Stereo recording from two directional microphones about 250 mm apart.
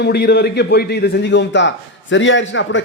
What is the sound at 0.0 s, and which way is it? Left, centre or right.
A man's voice, left.